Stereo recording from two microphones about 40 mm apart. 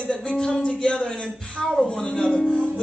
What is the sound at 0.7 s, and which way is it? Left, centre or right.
Music, left.